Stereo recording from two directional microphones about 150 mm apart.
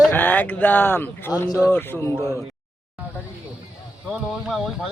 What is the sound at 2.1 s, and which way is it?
Speech, 25° right (ahead or behind).